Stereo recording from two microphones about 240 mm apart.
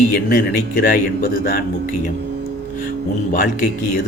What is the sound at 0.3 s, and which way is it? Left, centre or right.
Speech, left.